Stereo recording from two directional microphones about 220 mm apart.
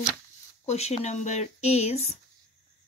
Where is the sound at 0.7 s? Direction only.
30° left (ahead or behind).